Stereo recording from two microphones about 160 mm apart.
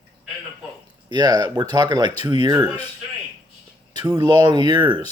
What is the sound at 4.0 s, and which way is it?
Speech, 25° right (ahead or behind).